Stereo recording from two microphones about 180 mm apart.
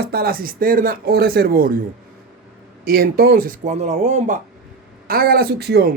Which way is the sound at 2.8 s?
55° right (ahead or behind).